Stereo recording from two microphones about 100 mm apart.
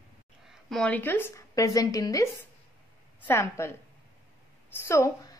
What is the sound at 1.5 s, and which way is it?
Speech, 35° left (ahead or behind).